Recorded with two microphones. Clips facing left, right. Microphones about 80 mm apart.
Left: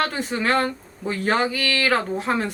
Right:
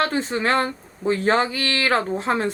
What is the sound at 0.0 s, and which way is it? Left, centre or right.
Speech, right.